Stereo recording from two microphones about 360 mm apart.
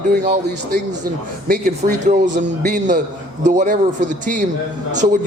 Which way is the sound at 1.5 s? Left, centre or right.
Centre.